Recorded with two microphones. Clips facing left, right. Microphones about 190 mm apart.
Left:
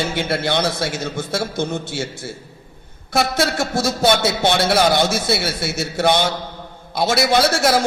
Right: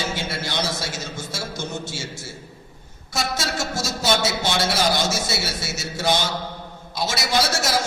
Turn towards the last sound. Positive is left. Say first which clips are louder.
# left 6 dB
turn(degrees=60)  # may be behind; listen again after turning